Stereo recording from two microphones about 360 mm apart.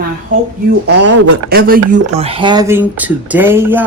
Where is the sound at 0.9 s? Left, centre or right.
Right.